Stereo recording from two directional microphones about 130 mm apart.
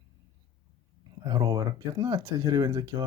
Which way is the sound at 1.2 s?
35° right (ahead or behind).